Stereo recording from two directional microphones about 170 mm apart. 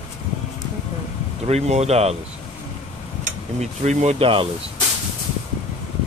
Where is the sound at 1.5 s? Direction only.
40° right (ahead or behind).